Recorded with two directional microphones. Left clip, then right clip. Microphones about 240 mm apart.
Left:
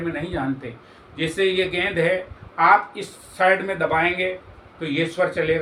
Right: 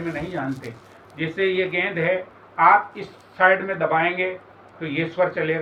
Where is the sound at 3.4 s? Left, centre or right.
Centre.